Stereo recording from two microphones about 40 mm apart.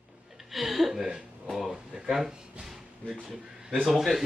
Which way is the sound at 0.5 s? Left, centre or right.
Centre.